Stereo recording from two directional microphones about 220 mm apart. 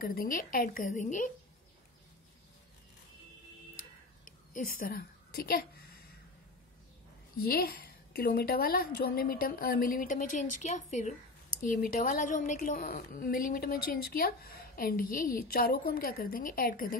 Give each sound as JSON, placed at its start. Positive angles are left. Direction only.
{"t": 0.0, "sound": "a woman's voice", "side_deg": 40}
{"t": 4.7, "sound": "a woman's voice", "side_deg": 40}
{"t": 7.4, "sound": "a woman's voice", "side_deg": 45}